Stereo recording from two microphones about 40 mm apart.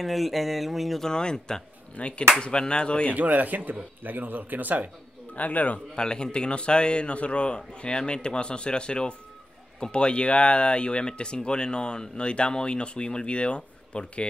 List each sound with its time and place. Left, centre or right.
0.0 s a sound: centre
1.0 s speech: centre
2.0 s speech: left
3.2 s speech: right
5.3 s a man's voice: left
5.9 s speech: left